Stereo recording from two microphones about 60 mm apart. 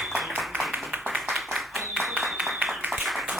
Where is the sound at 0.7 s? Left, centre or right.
Right.